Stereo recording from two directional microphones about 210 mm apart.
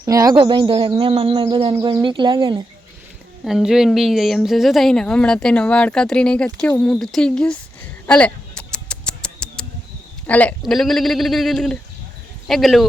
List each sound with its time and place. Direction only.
0.0 s speech: 15° right (ahead or behind)
3.4 s a woman's voice: centre (ahead or behind)
8.0 s a sound: 5° left (ahead or behind)
10.2 s a woman's voice: 5° left (ahead or behind)